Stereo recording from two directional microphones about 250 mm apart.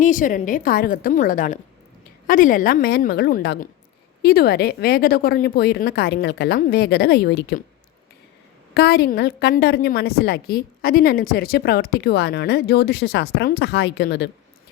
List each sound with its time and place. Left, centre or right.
0.0 s a woman's voice: left
8.7 s a woman's voice: left